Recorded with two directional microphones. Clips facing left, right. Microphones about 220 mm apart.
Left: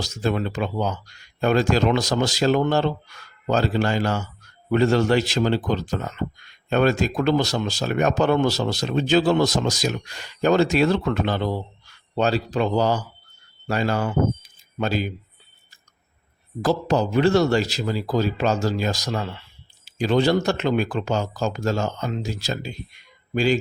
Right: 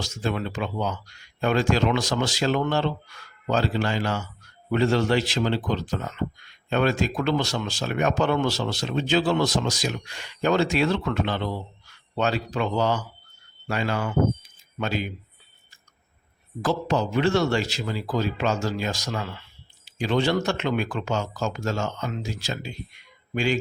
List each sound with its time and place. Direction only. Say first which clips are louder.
0.0 s a man's voice: left 4 dB; 40° left (ahead or behind)
16.6 s speech: left 3 dB; 35° left (ahead or behind)